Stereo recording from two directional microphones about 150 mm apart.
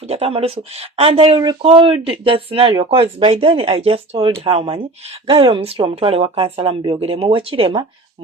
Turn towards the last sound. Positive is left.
turn(degrees=-35)  # may be behind; listen again after turning